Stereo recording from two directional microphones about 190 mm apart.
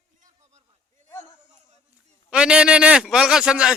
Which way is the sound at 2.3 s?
5° right (ahead or behind).